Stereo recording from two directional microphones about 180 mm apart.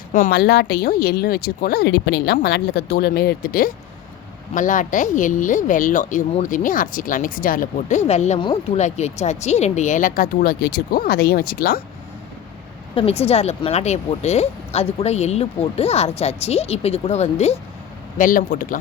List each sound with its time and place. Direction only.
0.3 s speech: 65° left (ahead or behind); by 8.4 s 40° left (ahead or behind)
8.4 s speech: 25° left (ahead or behind)
8.8 s speech: 40° left (ahead or behind); by 11.8 s 55° left (ahead or behind)
12.9 s speech: 30° left (ahead or behind)
18.2 s speech: 50° left (ahead or behind)